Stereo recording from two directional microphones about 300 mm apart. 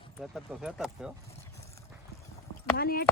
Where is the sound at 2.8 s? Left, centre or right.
Left.